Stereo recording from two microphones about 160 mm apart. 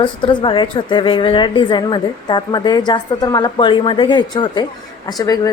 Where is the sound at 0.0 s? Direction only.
30° left (ahead or behind).